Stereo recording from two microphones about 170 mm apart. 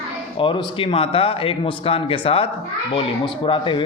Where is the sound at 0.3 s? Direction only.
30° left (ahead or behind).